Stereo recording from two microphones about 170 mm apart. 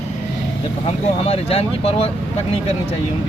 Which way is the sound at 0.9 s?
35° left (ahead or behind).